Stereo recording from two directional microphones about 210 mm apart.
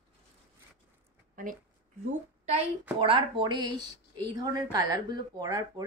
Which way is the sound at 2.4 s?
30° right (ahead or behind).